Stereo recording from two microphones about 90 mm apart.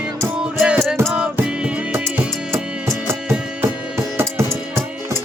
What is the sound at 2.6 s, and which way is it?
Music, 10° right (ahead or behind).